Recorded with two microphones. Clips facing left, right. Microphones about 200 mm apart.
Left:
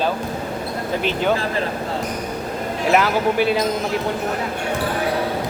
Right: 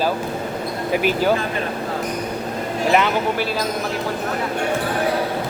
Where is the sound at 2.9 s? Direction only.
Centre (ahead or behind).